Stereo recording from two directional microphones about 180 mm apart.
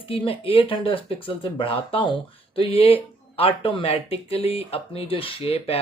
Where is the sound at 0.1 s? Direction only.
30° left (ahead or behind).